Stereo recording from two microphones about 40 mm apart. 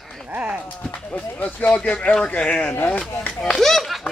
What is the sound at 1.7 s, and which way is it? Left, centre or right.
Speech, left.